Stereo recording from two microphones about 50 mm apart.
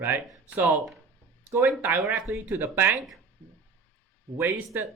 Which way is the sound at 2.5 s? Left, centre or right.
Right.